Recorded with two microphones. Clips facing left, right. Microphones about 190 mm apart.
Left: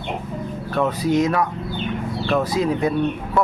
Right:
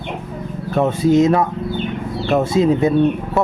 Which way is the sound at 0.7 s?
25° right (ahead or behind).